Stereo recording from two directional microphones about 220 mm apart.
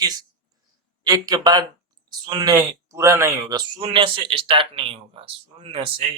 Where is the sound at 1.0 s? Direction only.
15° right (ahead or behind).